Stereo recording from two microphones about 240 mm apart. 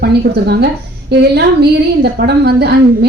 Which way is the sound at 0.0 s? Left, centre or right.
Right.